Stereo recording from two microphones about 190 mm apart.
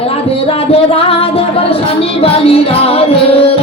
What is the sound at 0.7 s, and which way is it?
Music, 30° left (ahead or behind).